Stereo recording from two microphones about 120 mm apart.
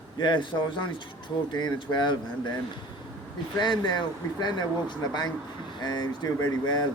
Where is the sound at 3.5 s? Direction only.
40° left (ahead or behind).